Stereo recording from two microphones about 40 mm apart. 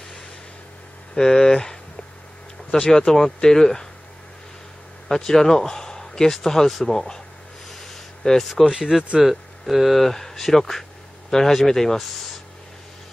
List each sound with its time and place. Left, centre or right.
1.1 s speech: centre
5.0 s speech: centre
7.7 s a sound: centre
8.5 s speech: centre